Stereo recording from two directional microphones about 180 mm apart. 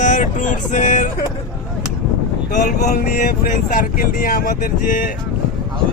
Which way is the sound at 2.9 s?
50° left (ahead or behind).